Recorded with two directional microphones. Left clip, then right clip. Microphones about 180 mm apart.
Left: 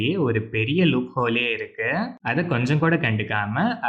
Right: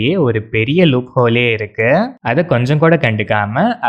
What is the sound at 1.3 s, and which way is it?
Speech, 55° right (ahead or behind).